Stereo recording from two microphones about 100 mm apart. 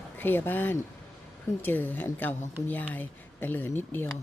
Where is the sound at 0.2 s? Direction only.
20° left (ahead or behind).